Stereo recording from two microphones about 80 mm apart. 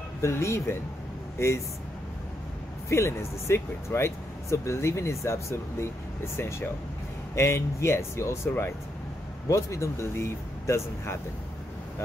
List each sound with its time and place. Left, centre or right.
0.2 s speech: left
2.9 s speech: left